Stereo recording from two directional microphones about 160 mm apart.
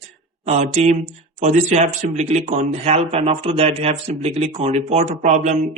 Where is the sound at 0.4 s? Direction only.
45° right (ahead or behind).